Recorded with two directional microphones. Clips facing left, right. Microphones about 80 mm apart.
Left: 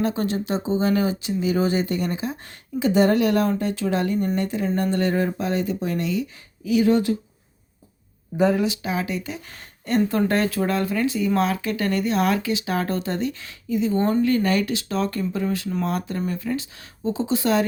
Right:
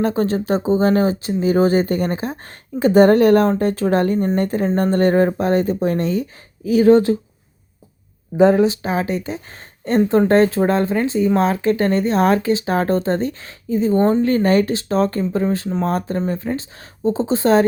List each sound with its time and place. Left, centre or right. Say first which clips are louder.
0.0 s speech: right 5 dB; right
8.4 s speech: right 7 dB; right